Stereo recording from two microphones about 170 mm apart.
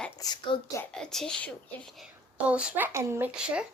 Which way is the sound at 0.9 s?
5° left (ahead or behind).